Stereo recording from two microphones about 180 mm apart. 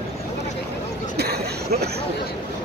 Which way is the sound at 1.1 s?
60° right (ahead or behind).